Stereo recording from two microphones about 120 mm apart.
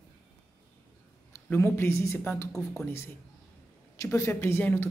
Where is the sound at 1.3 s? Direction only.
20° left (ahead or behind).